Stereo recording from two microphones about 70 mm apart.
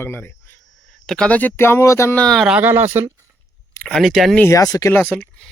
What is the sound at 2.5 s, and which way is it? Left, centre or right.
Speech, right.